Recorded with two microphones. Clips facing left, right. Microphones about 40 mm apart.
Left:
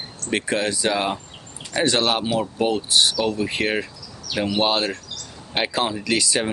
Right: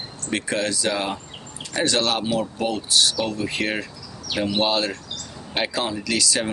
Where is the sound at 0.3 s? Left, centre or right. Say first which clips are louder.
Left 2 dB; centre.